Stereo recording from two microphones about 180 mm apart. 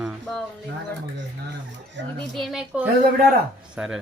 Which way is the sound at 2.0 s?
80° right.